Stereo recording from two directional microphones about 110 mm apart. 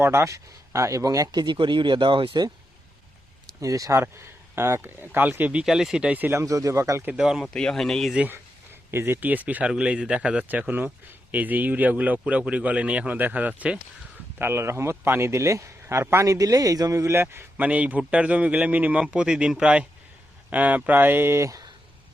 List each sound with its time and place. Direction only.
0.0 s speech: 25° right (ahead or behind); by 2.5 s 50° right (ahead or behind)
3.6 s a man's voice: 30° right (ahead or behind)
6.4 s speech: 30° right (ahead or behind)
7.2 s speech: 5° right (ahead or behind)
8.1 s a man's voice: 10° right (ahead or behind)